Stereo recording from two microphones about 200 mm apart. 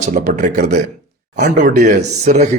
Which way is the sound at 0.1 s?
40° right (ahead or behind).